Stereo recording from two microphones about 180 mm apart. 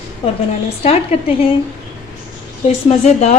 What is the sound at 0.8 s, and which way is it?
Speech, 35° left (ahead or behind).